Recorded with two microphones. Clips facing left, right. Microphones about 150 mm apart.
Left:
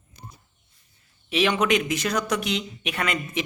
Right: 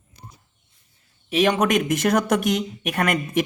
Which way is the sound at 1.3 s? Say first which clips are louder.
Right 3 dB; 45° right (ahead or behind).